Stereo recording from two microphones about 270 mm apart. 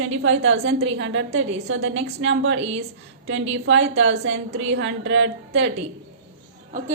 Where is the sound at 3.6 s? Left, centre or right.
Right.